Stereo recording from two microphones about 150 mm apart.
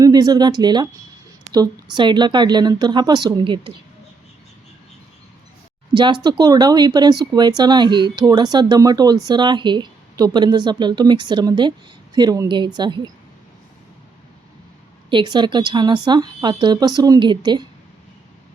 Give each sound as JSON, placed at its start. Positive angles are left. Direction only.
{"t": 0.0, "sound": "speech", "side_deg": -25}
{"t": 5.9, "sound": "speech", "side_deg": -30}
{"t": 15.1, "sound": "speech", "side_deg": -30}